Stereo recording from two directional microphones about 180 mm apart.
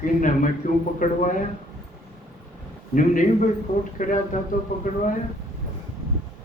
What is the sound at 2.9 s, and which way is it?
A man's voice, 45° left (ahead or behind).